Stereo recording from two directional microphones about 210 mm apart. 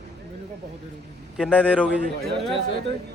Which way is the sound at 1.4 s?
5° left (ahead or behind).